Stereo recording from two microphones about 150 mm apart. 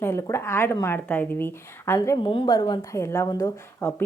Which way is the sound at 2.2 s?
35° left (ahead or behind).